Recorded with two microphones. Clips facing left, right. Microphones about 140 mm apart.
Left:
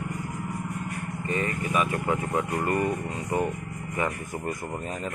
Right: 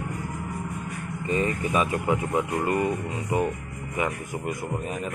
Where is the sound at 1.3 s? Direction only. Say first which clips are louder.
Right 3 dB; 20° right (ahead or behind).